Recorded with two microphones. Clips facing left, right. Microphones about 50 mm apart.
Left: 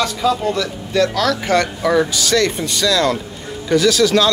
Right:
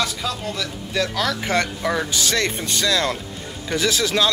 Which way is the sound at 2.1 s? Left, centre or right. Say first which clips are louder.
Left 5 dB; right.